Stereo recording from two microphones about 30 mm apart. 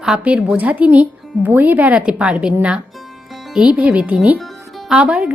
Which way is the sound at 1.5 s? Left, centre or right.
Right.